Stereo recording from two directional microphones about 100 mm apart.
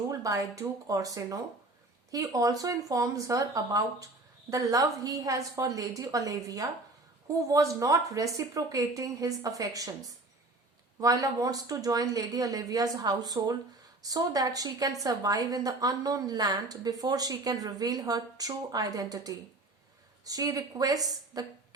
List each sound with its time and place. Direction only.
0.2 s a woman's voice: 35° right (ahead or behind)